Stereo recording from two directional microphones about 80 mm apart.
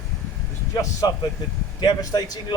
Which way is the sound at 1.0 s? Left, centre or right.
Left.